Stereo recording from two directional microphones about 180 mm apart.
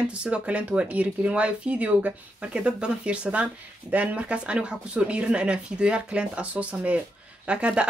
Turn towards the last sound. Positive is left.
turn(degrees=-5)  # may be behind; listen again after turning